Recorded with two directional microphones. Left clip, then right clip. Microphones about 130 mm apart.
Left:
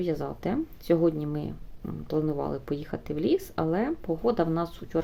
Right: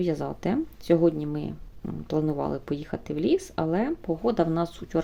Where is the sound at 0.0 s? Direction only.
15° right (ahead or behind).